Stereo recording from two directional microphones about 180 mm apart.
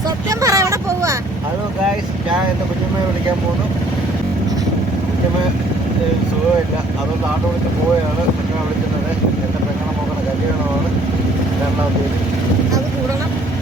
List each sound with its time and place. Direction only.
0.3 s vehicle: 20° right (ahead or behind)